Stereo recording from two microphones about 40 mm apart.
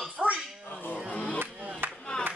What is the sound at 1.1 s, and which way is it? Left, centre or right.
Chop, left.